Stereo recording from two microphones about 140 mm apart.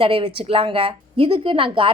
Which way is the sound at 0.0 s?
40° right (ahead or behind).